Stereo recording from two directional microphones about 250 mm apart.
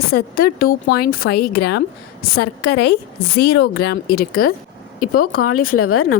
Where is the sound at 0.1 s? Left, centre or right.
Left.